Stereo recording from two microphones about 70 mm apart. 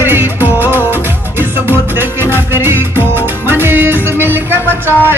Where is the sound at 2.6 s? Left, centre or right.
Right.